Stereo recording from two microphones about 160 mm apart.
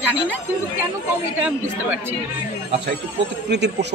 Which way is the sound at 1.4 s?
10° right (ahead or behind).